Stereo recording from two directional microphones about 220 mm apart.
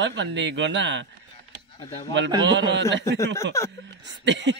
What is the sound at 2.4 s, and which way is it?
Speech, 55° right (ahead or behind).